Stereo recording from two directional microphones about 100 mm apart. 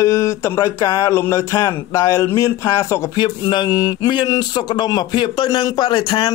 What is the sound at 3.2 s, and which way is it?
Speech, 45° left (ahead or behind).